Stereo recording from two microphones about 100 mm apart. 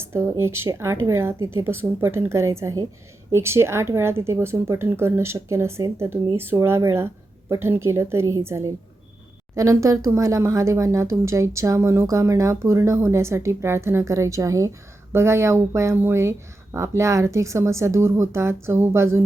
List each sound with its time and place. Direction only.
0.0 s speech: 25° right (ahead or behind)